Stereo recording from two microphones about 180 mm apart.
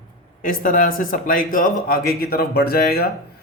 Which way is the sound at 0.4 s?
50° left (ahead or behind).